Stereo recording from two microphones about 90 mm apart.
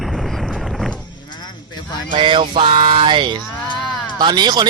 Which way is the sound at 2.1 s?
70° right (ahead or behind).